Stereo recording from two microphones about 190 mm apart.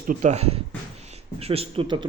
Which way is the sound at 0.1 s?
40° right (ahead or behind).